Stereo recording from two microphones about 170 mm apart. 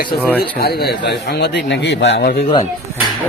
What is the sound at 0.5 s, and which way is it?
Speech, 65° left (ahead or behind).